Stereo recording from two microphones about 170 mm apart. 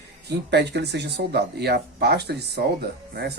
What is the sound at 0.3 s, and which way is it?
Speech, 80° right.